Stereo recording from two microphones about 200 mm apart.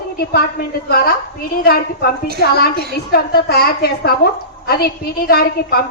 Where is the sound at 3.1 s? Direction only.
50° left (ahead or behind).